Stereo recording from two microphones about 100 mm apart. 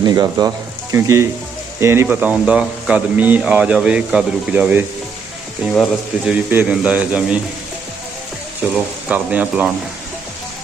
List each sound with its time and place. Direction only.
0.0 s speech: 40° right (ahead or behind)
0.9 s speech: 30° right (ahead or behind)
8.7 s speech: 15° right (ahead or behind)